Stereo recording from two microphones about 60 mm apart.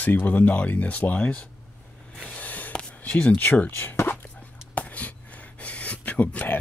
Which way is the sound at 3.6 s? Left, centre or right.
Left.